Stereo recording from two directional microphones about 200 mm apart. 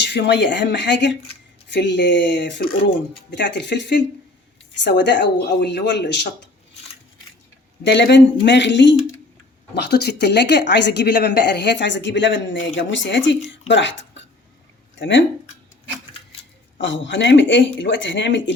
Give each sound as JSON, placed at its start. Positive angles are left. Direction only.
{"t": 0.0, "sound": "speech", "side_deg": 60}
{"t": 7.9, "sound": "speech", "side_deg": 60}
{"t": 16.8, "sound": "speech", "side_deg": 65}